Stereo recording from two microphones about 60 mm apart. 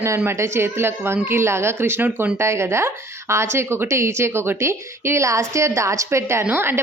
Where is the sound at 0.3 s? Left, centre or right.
Right.